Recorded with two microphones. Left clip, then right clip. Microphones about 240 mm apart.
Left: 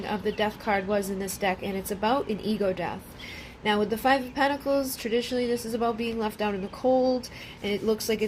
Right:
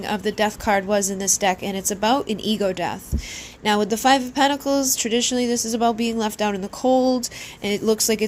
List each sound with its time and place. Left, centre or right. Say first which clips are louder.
0.0 s a woman's voice: right 6 dB; right